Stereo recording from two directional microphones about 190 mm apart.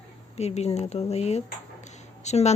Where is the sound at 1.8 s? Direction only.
35° left (ahead or behind).